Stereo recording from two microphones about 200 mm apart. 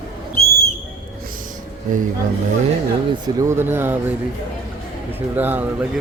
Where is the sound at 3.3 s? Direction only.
15° right (ahead or behind).